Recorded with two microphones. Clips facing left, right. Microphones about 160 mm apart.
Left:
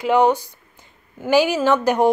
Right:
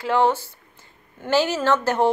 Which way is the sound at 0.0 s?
15° left (ahead or behind).